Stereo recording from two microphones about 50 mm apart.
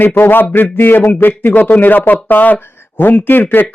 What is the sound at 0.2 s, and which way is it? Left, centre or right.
Speech, left.